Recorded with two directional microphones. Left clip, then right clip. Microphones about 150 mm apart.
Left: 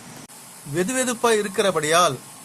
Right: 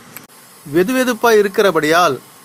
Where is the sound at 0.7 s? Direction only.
30° right (ahead or behind).